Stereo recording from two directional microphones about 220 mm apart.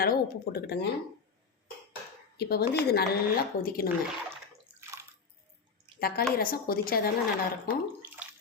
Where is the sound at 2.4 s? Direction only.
45° left (ahead or behind).